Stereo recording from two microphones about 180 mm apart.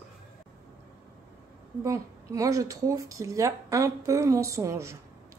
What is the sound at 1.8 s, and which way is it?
Speech, 15° right (ahead or behind).